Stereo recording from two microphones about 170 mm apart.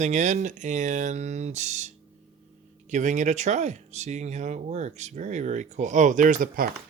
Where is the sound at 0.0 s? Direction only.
45° right (ahead or behind).